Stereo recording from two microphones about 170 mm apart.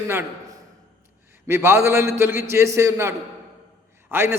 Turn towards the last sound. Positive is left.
turn(degrees=-15)  # may be behind; listen again after turning